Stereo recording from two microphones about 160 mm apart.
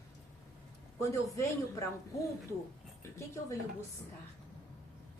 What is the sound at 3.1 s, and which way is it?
Speech, 15° left (ahead or behind).